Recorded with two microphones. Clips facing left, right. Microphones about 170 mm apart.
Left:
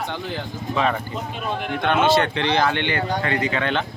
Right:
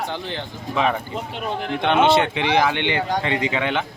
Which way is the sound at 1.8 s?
25° right (ahead or behind).